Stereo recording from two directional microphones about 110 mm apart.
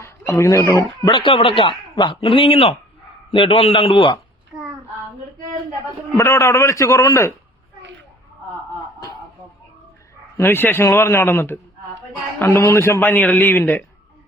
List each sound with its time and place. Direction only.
0.0 s chicken: 25° left (ahead or behind)
0.8 s speech: 40° left (ahead or behind)
1.2 s a man's voice: 55° left (ahead or behind)
6.1 s a man's voice: 25° left (ahead or behind)
10.3 s a man's voice: 20° left (ahead or behind)